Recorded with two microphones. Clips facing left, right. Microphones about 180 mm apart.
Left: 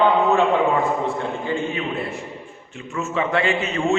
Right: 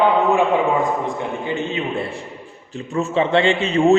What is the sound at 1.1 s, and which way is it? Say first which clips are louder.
A man's voice: even; 20° right (ahead or behind).